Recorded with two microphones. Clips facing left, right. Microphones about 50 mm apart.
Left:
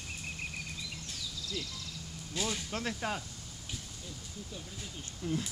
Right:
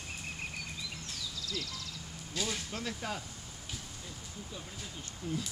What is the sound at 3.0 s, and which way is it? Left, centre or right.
Speech, left.